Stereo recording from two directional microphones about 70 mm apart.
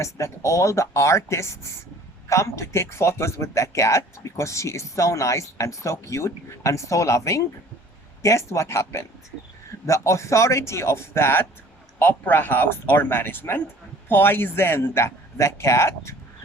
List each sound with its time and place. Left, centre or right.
0.0 s speech: left